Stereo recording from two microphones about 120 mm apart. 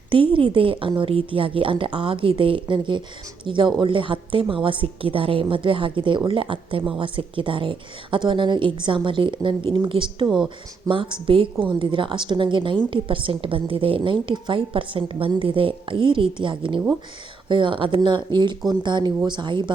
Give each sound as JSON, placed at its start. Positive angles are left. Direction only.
{"t": 0.1, "sound": "a woman's voice", "side_deg": -45}